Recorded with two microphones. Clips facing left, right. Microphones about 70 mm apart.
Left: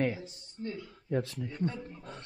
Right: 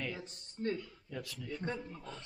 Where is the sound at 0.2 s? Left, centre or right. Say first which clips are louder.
Right 1 dB; right.